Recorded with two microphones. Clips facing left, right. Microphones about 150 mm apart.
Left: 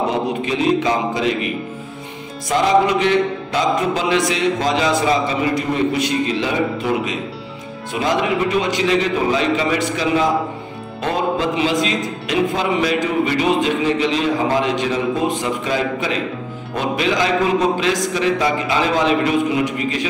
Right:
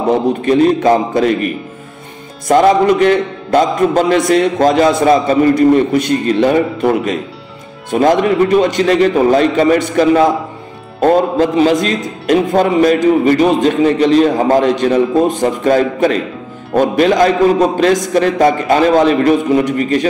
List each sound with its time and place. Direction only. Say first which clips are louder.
0.5 s a man's voice: right 9 dB; 50° right (ahead or behind)